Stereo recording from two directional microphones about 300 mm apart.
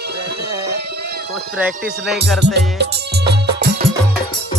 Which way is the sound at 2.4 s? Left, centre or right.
Right.